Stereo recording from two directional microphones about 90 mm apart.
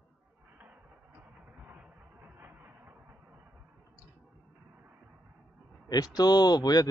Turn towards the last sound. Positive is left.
turn(degrees=50)  # may be behind; listen again after turning